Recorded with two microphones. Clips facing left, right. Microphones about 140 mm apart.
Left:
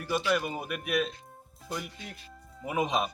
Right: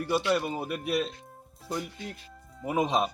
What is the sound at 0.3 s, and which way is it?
Speech, 30° right (ahead or behind).